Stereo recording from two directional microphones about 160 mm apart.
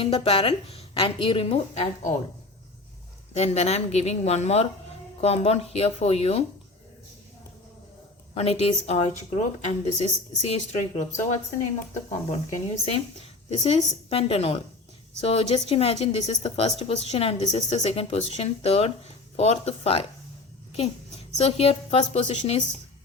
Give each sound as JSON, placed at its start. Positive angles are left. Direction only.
{"t": 0.0, "sound": "a woman's voice", "side_deg": 35}
{"t": 3.3, "sound": "a woman's voice", "side_deg": 40}
{"t": 8.4, "sound": "a woman's voice", "side_deg": 40}
{"t": 12.5, "sound": "a woman's voice", "side_deg": 40}
{"t": 21.3, "sound": "a woman's voice", "side_deg": 40}